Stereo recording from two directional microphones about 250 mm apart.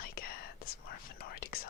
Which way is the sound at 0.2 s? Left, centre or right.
Left.